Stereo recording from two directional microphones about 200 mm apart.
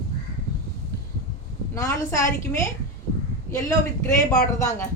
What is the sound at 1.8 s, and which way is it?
A woman's voice, 15° left (ahead or behind).